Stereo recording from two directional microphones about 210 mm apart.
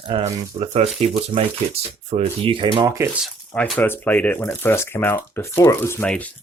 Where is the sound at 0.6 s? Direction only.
30° right (ahead or behind).